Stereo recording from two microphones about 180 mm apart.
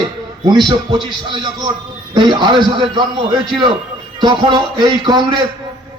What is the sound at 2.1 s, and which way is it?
A man's voice, 25° right (ahead or behind).